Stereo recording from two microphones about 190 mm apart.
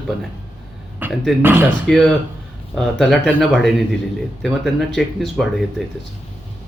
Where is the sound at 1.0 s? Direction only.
10° right (ahead or behind).